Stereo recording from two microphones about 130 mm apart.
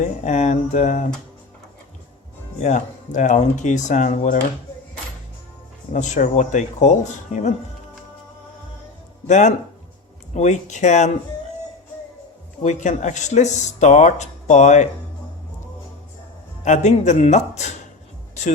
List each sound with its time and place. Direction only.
0.0 s speech: 65° left (ahead or behind)
2.6 s speech: 70° left (ahead or behind)
5.9 s speech: 70° left (ahead or behind)
9.2 s speech: 65° left (ahead or behind)
12.6 s speech: 70° left (ahead or behind)
16.6 s speech: 65° left (ahead or behind)